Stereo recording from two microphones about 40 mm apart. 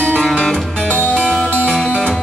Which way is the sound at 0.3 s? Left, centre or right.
Left.